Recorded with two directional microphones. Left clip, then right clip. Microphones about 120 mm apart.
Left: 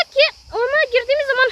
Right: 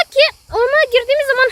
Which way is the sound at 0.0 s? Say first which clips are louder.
Right 3 dB; 35° right (ahead or behind).